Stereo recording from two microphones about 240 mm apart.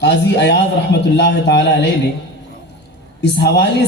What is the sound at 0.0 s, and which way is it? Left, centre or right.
A man's voice, left.